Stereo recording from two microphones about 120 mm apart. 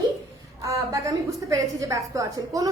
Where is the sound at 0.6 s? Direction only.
25° right (ahead or behind).